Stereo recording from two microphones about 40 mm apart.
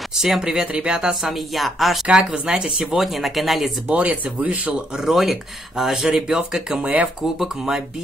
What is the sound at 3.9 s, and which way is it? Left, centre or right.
Speech, right.